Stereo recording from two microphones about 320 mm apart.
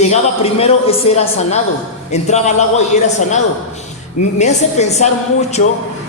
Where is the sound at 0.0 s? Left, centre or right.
Centre.